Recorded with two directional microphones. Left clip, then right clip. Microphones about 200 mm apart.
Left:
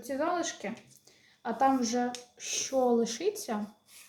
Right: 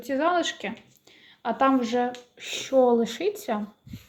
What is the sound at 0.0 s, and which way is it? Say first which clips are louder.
A woman's voice: right 7 dB; 30° right (ahead or behind).